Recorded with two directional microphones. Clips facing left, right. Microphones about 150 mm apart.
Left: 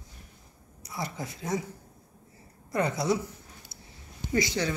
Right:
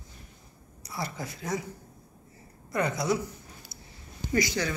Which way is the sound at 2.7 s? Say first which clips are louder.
Left 1 dB; 30° left (ahead or behind).